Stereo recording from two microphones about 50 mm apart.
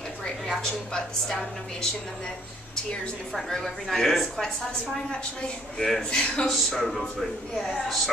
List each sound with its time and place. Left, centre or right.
0.2 s a woman's voice: centre
3.3 s a woman's voice: centre
5.8 s a woman's voice: centre
6.4 s a woman's voice: centre